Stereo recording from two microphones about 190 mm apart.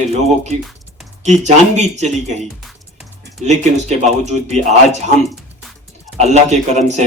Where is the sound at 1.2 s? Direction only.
35° right (ahead or behind).